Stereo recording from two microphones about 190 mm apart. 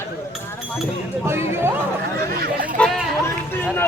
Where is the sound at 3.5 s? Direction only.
10° left (ahead or behind).